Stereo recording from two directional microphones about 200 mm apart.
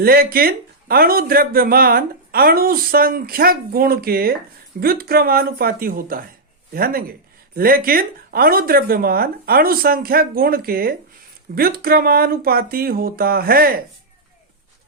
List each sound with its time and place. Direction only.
0.0 s speech: 50° right (ahead or behind)